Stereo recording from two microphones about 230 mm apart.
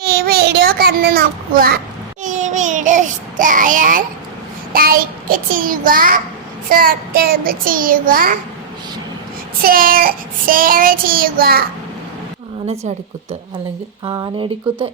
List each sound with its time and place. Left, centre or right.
0.0 s child singing: right
2.2 s a sound: right
4.7 s child singing: right
9.6 s child singing: right
14.0 s speech: centre